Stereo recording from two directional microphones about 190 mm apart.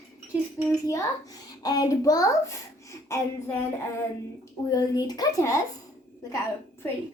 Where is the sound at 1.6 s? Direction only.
20° left (ahead or behind).